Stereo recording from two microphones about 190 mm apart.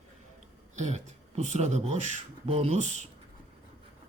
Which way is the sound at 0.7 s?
35° right (ahead or behind).